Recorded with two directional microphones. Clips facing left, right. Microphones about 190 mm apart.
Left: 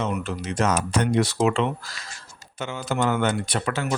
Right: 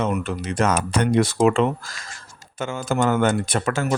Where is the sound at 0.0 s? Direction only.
55° right (ahead or behind).